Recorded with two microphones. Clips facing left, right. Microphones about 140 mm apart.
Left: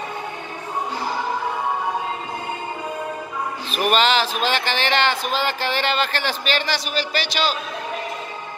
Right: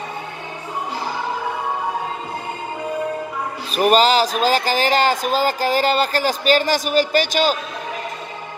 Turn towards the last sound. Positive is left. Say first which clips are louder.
# right 6 dB
turn(degrees=-45)  # may be behind; listen again after turning